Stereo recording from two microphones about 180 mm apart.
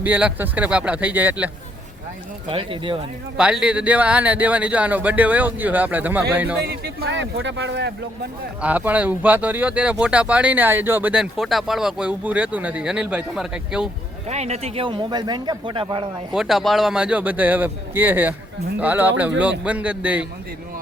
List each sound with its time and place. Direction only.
0.0 s speech: 10° right (ahead or behind)
2.5 s speech: 30° right (ahead or behind)
3.3 s speech: 5° right (ahead or behind)
6.7 s speech: 65° right (ahead or behind)
8.6 s speech: 10° right (ahead or behind)
14.3 s speech: 35° right (ahead or behind)
16.3 s speech: centre (ahead or behind)